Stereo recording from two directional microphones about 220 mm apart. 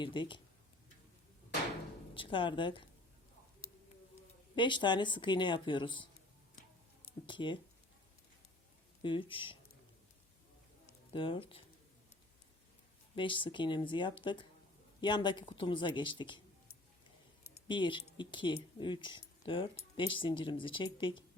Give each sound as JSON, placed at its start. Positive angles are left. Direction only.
{"t": 0.0, "sound": "speech", "side_deg": 20}
{"t": 2.1, "sound": "speech", "side_deg": 20}
{"t": 4.5, "sound": "speech", "side_deg": 20}
{"t": 7.3, "sound": "speech", "side_deg": 20}
{"t": 9.0, "sound": "speech", "side_deg": 25}
{"t": 11.1, "sound": "speech", "side_deg": 25}
{"t": 13.1, "sound": "speech", "side_deg": 20}
{"t": 17.7, "sound": "speech", "side_deg": 20}